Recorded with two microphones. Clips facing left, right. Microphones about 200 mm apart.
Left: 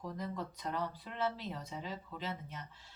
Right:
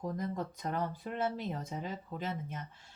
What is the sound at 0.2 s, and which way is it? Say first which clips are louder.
Speech: right 4 dB; 50° right (ahead or behind).